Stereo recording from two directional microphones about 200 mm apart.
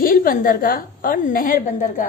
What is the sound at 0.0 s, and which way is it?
A woman's voice, 45° left (ahead or behind).